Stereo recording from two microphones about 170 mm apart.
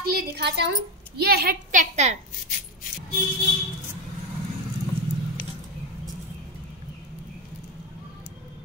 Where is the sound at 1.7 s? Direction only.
45° right (ahead or behind).